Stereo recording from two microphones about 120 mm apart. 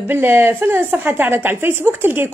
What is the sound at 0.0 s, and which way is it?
A woman's voice, 15° right (ahead or behind).